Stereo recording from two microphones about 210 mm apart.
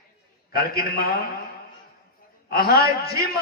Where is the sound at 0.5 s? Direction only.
45° left (ahead or behind).